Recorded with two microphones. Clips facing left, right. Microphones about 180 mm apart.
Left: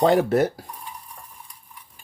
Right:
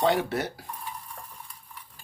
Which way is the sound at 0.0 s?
50° left (ahead or behind).